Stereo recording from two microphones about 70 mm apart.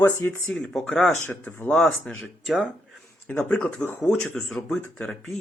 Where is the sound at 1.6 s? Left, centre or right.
Centre.